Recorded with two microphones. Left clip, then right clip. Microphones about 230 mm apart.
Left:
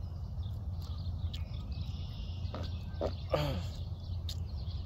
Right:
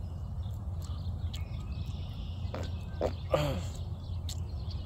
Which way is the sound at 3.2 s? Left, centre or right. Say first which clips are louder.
Right 3 dB; centre.